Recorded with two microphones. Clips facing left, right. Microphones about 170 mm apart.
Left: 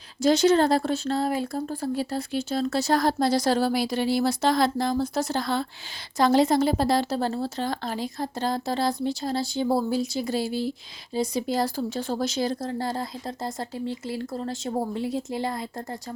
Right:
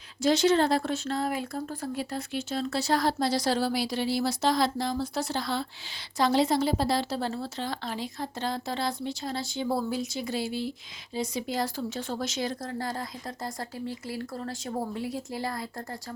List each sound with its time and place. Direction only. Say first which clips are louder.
0.2 s a woman's voice: left 3 dB; 40° left (ahead or behind); by 16.0 s 20° left (ahead or behind)